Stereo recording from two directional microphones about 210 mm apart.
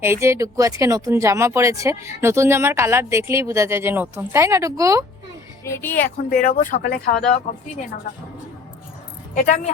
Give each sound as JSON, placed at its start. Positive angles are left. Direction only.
{"t": 0.0, "sound": "speech", "side_deg": -10}
{"t": 5.6, "sound": "speech", "side_deg": 10}
{"t": 6.3, "sound": "speech", "side_deg": 40}
{"t": 9.3, "sound": "speech", "side_deg": 35}